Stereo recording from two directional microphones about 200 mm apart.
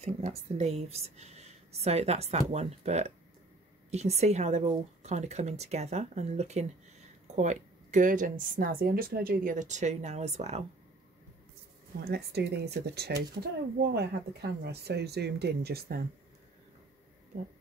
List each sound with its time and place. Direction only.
0.0 s speech: 30° right (ahead or behind)
12.0 s speech: 55° right (ahead or behind)